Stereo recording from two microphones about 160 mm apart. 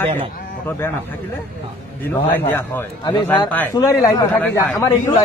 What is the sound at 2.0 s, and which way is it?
A man's voice, 10° left (ahead or behind).